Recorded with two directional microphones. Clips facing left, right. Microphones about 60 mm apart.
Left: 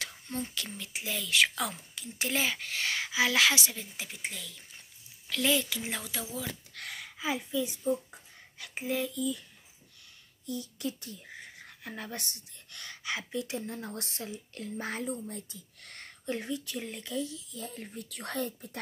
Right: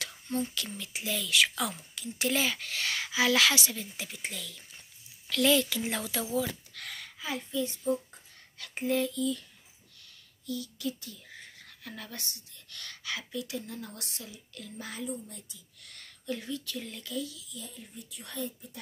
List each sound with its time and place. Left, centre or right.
0.0 s a woman's voice: left; by 9.4 s centre
10.4 s speech: left
11.3 s speech: centre; by 18.8 s left